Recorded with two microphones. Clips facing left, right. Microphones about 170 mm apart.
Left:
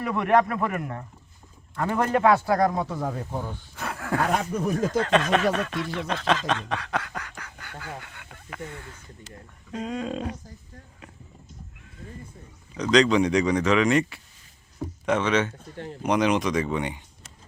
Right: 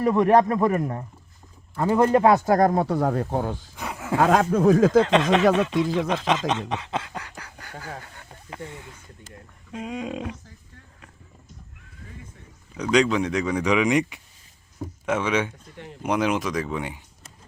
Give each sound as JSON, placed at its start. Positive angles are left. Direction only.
{"t": 0.0, "sound": "speech", "side_deg": -35}
{"t": 2.8, "sound": "speech", "side_deg": -65}
{"t": 3.8, "sound": "a sound", "side_deg": -15}
{"t": 4.2, "sound": "speech", "side_deg": -90}
{"t": 5.0, "sound": "speech", "side_deg": -20}
{"t": 9.7, "sound": "speech", "side_deg": -10}
{"t": 12.7, "sound": "speech", "side_deg": -10}
{"t": 15.7, "sound": "speech", "side_deg": 35}
{"t": 16.0, "sound": "speech", "side_deg": -5}